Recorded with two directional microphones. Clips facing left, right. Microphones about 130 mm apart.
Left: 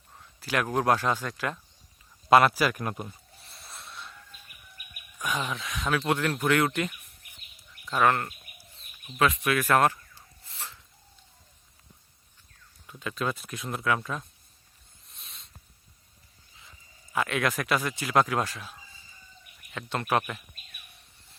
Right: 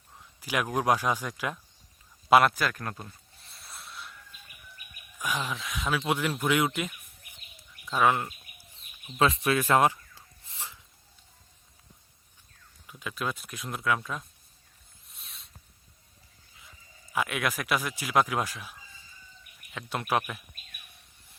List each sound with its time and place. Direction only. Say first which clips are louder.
0.3 s speech: left 2 dB; 10° right (ahead or behind)
2.3 s speech: left 1 dB; 5° left (ahead or behind)
3.3 s a sound: left 1 dB; centre (ahead or behind)
5.2 s speech: left 1 dB; centre (ahead or behind)
7.9 s bird: left 1 dB; 10° right (ahead or behind)
9.1 s speech: even; 30° right (ahead or behind)
10.4 s a sound: even; 15° right (ahead or behind)
12.9 s speech: left 3 dB; 5° right (ahead or behind)
15.1 s a sound: left 1 dB; centre (ahead or behind)
17.1 s speech: left 2 dB; 5° right (ahead or behind)